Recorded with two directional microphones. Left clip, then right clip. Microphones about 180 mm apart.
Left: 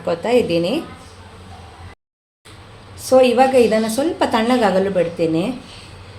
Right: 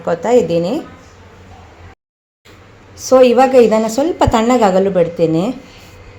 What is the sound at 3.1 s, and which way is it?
A woman's voice, 35° right (ahead or behind).